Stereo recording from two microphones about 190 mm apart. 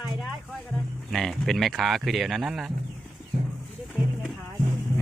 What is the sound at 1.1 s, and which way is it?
Speech, centre (ahead or behind).